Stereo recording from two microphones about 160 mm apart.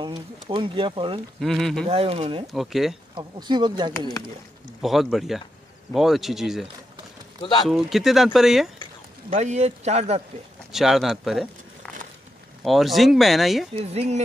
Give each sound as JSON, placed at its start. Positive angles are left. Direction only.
{"t": 0.0, "sound": "speech", "side_deg": -30}
{"t": 1.4, "sound": "speech", "side_deg": 0}
{"t": 1.9, "sound": "speech", "side_deg": -35}
{"t": 2.4, "sound": "speech", "side_deg": 0}
{"t": 3.2, "sound": "speech", "side_deg": -30}
{"t": 4.8, "sound": "speech", "side_deg": 0}
{"t": 9.3, "sound": "speech", "side_deg": -45}
{"t": 10.7, "sound": "speech", "side_deg": 0}
{"t": 13.7, "sound": "speech", "side_deg": -40}